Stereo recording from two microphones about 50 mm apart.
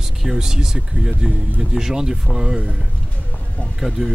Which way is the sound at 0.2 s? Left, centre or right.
Centre.